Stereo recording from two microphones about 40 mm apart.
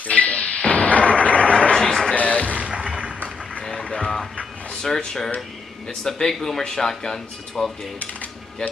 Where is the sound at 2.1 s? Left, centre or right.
Left.